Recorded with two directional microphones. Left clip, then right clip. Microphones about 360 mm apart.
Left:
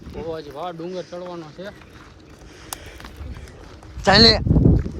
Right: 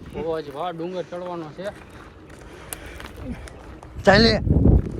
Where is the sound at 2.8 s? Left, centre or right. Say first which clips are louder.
Right 2 dB; centre.